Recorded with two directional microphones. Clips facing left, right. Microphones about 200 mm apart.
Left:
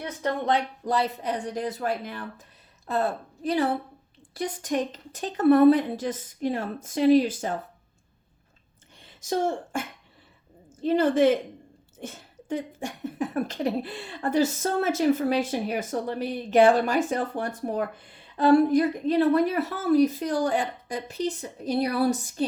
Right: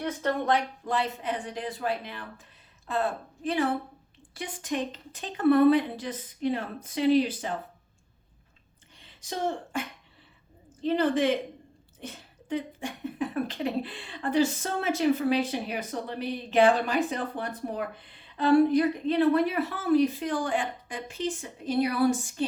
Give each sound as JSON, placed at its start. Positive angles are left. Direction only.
{"t": 0.9, "sound": "a woman's voice", "side_deg": 40}
{"t": 9.0, "sound": "speech", "side_deg": 45}